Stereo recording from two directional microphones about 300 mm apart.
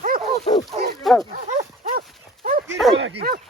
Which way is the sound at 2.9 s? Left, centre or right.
Right.